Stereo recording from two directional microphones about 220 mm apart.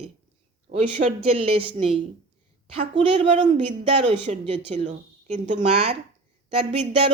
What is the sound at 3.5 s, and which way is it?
A woman's voice, 30° right (ahead or behind).